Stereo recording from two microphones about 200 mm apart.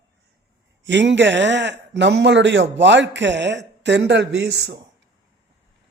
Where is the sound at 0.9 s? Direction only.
60° right (ahead or behind).